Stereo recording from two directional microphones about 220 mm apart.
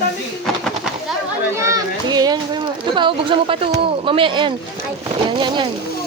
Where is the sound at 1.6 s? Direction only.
15° right (ahead or behind).